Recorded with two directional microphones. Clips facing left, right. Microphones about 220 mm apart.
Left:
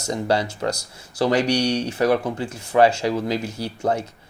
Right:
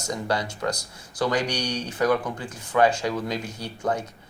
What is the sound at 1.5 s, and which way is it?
Speech, 65° left (ahead or behind).